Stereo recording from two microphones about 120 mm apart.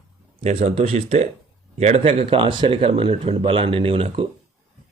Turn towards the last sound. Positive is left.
turn(degrees=-55)  # may be behind; listen again after turning